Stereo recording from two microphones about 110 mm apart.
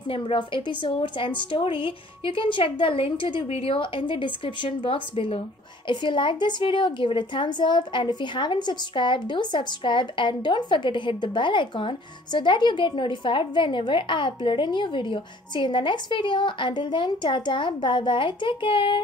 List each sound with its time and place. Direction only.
0.1 s a woman's voice: 50° left (ahead or behind)
3.4 s a woman's voice: 65° left (ahead or behind)